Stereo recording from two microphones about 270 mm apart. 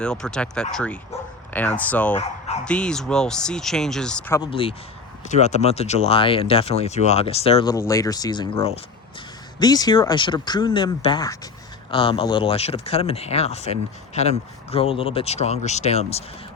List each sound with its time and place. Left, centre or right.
0.0 s speech: centre
4.4 s speech: centre